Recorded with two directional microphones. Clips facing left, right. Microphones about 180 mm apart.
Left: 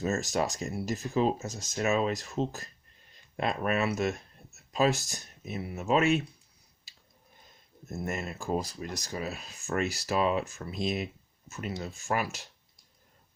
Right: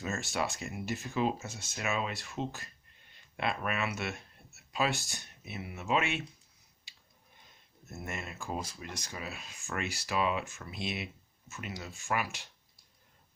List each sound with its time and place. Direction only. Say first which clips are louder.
0.0 s speech: left 6 dB; 40° left (ahead or behind)
6.9 s a sound: even; 40° left (ahead or behind)
7.9 s speech: left 7 dB; 40° left (ahead or behind)